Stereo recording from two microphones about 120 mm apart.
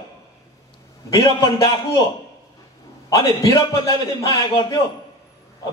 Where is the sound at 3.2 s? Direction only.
30° left (ahead or behind).